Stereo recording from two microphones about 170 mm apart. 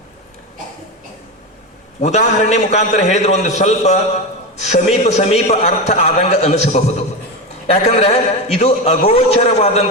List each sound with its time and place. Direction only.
2.0 s a man's voice: 45° left (ahead or behind)